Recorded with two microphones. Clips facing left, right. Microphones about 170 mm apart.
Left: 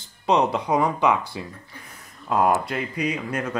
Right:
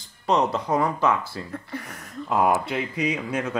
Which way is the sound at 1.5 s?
75° right (ahead or behind).